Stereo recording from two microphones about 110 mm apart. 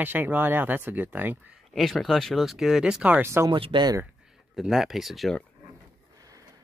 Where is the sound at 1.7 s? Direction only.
Centre (ahead or behind).